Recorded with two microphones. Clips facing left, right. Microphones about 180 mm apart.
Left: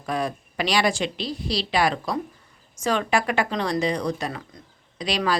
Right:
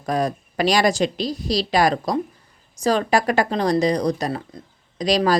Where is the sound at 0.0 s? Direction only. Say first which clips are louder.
Right 4 dB; 40° right (ahead or behind).